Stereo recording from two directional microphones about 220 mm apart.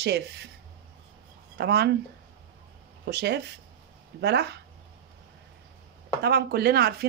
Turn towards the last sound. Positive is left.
turn(degrees=-45)  # may be behind; listen again after turning